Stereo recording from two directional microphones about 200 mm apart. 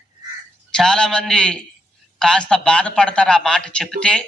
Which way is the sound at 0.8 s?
5° left (ahead or behind).